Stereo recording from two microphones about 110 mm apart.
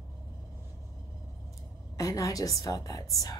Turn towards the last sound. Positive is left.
turn(degrees=35)  # may be behind; listen again after turning